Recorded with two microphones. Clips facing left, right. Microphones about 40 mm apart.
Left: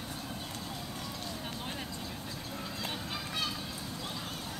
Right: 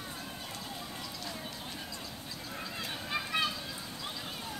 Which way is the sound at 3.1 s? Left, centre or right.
Right.